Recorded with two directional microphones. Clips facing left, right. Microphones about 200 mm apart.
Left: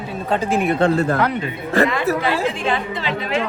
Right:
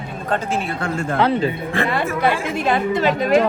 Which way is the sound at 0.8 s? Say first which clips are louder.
Left 7 dB; 35° left (ahead or behind).